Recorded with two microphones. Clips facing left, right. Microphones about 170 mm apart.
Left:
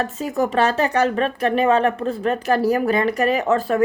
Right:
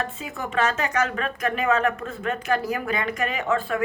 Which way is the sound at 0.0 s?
40° left (ahead or behind).